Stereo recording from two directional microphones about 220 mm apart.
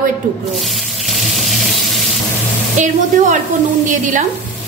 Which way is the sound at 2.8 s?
35° right (ahead or behind).